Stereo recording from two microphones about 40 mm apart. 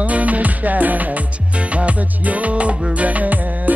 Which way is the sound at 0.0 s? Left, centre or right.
Right.